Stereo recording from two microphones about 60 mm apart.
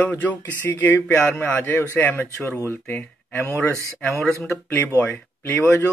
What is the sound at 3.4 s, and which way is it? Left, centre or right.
Speech, left.